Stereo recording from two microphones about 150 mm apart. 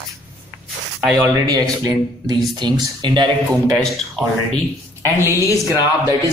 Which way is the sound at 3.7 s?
Centre (ahead or behind).